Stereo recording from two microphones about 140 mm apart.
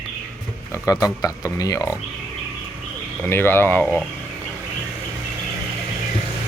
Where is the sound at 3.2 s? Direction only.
15° left (ahead or behind).